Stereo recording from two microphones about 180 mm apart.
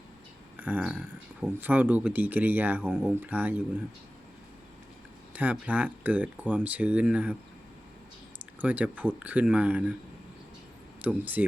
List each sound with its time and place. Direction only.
0.6 s speech: 10° right (ahead or behind)
5.3 s speech: 10° right (ahead or behind)
8.6 s speech: 10° right (ahead or behind)
11.0 s speech: 10° right (ahead or behind)